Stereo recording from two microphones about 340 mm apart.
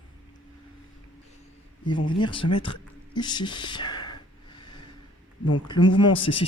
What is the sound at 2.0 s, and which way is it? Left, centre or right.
Speech, centre.